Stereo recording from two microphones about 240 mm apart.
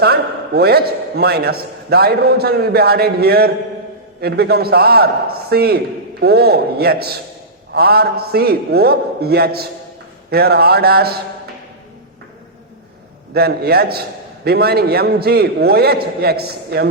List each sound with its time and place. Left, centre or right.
0.0 s a man's voice: right
13.3 s a man's voice: right